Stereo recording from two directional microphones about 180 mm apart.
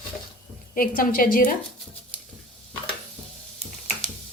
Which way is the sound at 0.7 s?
50° left (ahead or behind).